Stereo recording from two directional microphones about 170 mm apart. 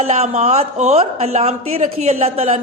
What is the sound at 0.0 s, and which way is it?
A man's voice, 40° right (ahead or behind).